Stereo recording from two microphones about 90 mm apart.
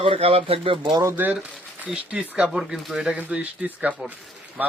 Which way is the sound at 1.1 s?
20° right (ahead or behind).